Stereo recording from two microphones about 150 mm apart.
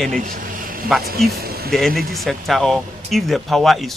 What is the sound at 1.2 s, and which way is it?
Music, 90° right.